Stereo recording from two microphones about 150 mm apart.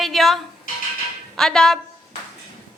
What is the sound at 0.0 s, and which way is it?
Music, centre (ahead or behind).